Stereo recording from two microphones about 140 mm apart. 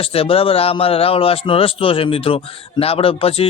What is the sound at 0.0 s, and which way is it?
A man's voice, 40° left (ahead or behind).